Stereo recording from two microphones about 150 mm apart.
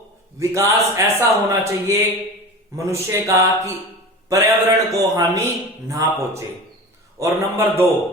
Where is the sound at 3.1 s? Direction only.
20° right (ahead or behind).